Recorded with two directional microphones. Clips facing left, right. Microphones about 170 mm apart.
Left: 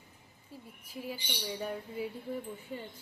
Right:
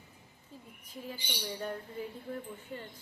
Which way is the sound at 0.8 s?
10° left (ahead or behind).